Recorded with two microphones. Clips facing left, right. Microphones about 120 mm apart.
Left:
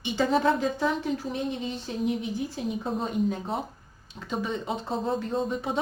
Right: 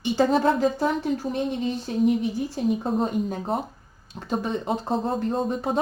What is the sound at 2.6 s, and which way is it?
Speech, 50° right (ahead or behind).